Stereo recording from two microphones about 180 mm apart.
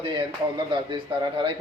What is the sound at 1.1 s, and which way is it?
Speech, 25° right (ahead or behind).